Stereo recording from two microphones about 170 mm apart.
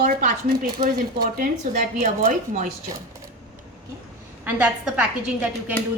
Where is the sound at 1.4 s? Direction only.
50° right (ahead or behind).